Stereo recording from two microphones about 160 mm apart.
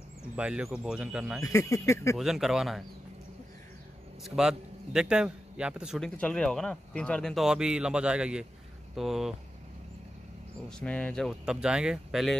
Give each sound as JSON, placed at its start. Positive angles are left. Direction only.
{"t": 0.4, "sound": "a man's voice", "side_deg": -5}
{"t": 1.4, "sound": "speech", "side_deg": 20}
{"t": 2.1, "sound": "a man's voice", "side_deg": 0}
{"t": 4.2, "sound": "a man's voice", "side_deg": -5}
{"t": 10.7, "sound": "a man's voice", "side_deg": 5}